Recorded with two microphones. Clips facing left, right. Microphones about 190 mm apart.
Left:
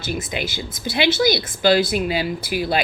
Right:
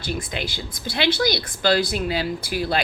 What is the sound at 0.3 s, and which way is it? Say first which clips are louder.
Speech: left 3 dB; 10° left (ahead or behind).